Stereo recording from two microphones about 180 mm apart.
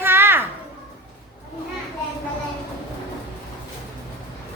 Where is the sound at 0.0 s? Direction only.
10° right (ahead or behind).